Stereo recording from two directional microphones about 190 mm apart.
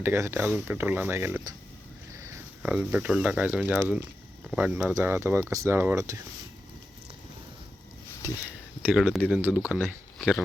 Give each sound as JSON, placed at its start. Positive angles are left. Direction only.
{"t": 0.0, "sound": "speech", "side_deg": -10}
{"t": 2.6, "sound": "speech", "side_deg": -10}
{"t": 8.2, "sound": "speech", "side_deg": -15}
{"t": 9.0, "sound": "speech", "side_deg": 0}